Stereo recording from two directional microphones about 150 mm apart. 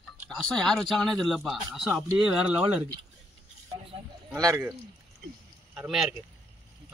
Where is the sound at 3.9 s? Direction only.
40° right (ahead or behind).